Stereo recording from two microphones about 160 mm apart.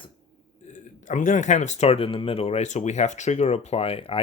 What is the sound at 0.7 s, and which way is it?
Speech, 50° left (ahead or behind).